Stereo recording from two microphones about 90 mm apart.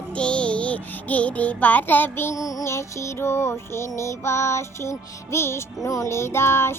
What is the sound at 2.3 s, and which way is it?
Music, 35° left (ahead or behind).